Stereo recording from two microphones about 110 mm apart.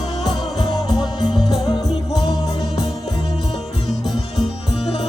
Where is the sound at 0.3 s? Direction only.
40° left (ahead or behind).